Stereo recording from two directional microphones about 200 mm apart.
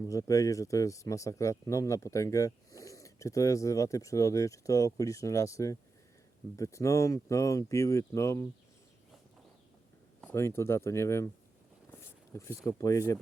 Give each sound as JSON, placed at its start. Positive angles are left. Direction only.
{"t": 0.1, "sound": "a man's voice", "side_deg": 15}
{"t": 10.2, "sound": "a man's voice", "side_deg": 10}
{"t": 11.9, "sound": "a sound", "side_deg": 10}
{"t": 12.6, "sound": "a man's voice", "side_deg": 15}